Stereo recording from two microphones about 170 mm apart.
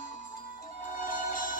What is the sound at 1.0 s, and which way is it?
Music, 50° left (ahead or behind).